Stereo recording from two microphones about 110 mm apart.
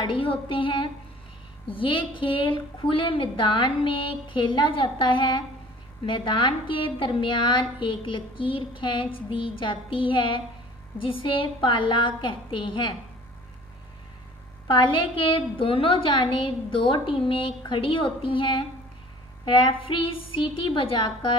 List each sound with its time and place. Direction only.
0.0 s a woman's voice: 50° left (ahead or behind)
14.7 s a woman's voice: 50° left (ahead or behind)